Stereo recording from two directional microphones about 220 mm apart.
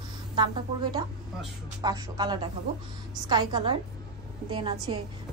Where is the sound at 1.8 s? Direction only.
20° right (ahead or behind).